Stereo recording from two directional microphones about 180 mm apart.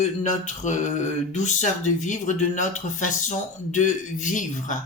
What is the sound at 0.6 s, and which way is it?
Mantra, 40° left (ahead or behind).